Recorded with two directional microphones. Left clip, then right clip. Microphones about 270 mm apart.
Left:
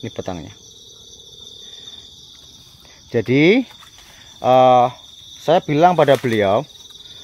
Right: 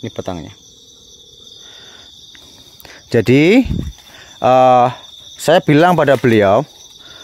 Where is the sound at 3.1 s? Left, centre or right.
Right.